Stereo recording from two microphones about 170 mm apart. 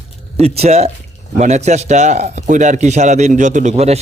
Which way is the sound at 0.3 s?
35° right (ahead or behind).